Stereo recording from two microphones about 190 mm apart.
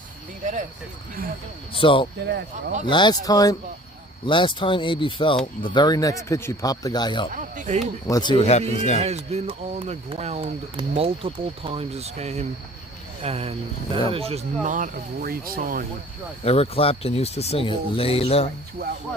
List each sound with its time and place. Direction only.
1.7 s speech: 25° left (ahead or behind)
2.2 s speech: 65° right (ahead or behind)
2.8 s speech: 25° left (ahead or behind)
7.3 s speech: 40° right (ahead or behind)
8.0 s speech: 20° left (ahead or behind); by 9.0 s 35° left (ahead or behind)
9.0 s speech: 35° right (ahead or behind)
16.4 s speech: 30° left (ahead or behind)